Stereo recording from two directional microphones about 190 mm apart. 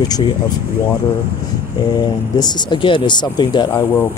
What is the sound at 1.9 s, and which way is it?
Speech, 20° left (ahead or behind).